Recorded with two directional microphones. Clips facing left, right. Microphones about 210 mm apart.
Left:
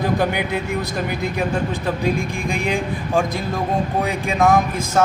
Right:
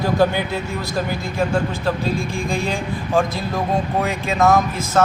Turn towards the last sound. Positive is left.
turn(degrees=15)  # may be behind; listen again after turning